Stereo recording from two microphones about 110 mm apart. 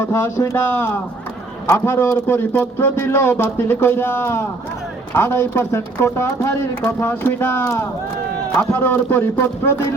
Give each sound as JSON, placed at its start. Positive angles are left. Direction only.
{"t": 0.0, "sound": "a man's voice", "side_deg": 25}